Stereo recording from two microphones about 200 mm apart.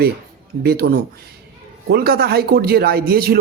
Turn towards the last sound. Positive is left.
turn(degrees=-50)  # may be behind; listen again after turning